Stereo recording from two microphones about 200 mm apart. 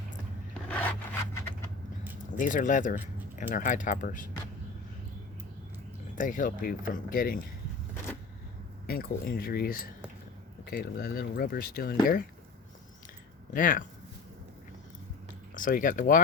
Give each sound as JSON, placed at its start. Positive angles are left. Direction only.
{"t": 0.7, "sound": "zipper", "side_deg": 5}
{"t": 2.4, "sound": "speech", "side_deg": 40}
{"t": 6.1, "sound": "speech", "side_deg": 40}
{"t": 8.9, "sound": "speech", "side_deg": 50}
{"t": 13.5, "sound": "speech", "side_deg": 45}
{"t": 15.5, "sound": "speech", "side_deg": 40}